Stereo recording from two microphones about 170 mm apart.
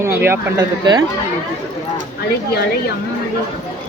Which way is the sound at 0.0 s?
15° right (ahead or behind).